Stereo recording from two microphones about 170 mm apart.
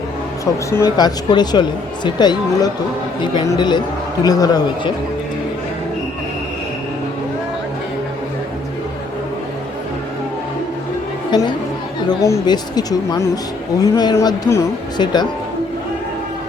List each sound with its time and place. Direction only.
0.7 s speech: 20° left (ahead or behind)
11.3 s speech: 25° left (ahead or behind)